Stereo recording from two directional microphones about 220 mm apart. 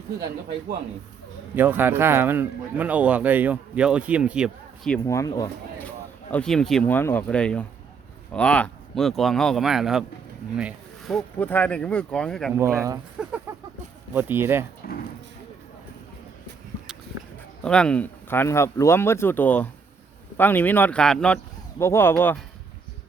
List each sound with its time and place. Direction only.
1.5 s speech: 10° right (ahead or behind)
5.0 s speech: 15° left (ahead or behind)
6.3 s speech: 5° left (ahead or behind)
12.5 s speech: 15° right (ahead or behind)
14.8 s speech: 40° left (ahead or behind)
17.6 s speech: 5° left (ahead or behind)